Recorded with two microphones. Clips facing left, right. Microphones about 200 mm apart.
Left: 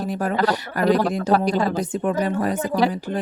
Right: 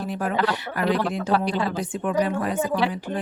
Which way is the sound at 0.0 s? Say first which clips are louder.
Left 3 dB; 40° left (ahead or behind).